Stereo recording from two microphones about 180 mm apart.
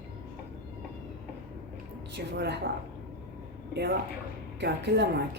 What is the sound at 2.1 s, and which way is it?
Speech, 70° right (ahead or behind).